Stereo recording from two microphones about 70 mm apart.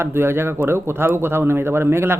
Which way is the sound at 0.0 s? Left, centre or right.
Right.